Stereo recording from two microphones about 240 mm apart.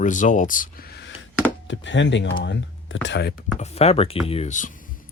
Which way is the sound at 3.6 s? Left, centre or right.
Left.